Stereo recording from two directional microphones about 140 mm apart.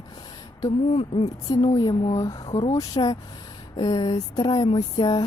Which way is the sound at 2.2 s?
25° left (ahead or behind).